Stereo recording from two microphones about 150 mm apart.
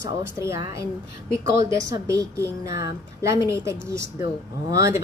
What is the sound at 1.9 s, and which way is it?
A woman's voice, 20° right (ahead or behind).